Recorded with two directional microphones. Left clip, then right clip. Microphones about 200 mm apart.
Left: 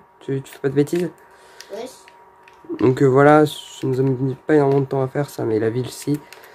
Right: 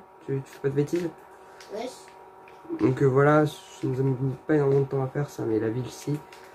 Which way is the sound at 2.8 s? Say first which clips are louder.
Left 8 dB; 40° left (ahead or behind).